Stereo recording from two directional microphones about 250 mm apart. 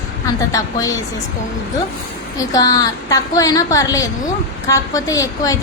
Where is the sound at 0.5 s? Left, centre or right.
Centre.